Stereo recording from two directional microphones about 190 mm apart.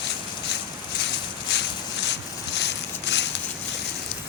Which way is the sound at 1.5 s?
65° left (ahead or behind).